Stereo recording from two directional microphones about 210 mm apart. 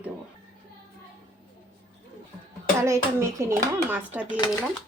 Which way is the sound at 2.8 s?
15° right (ahead or behind).